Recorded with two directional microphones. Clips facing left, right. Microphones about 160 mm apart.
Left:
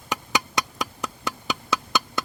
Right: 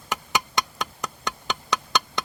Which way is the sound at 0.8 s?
5° left (ahead or behind).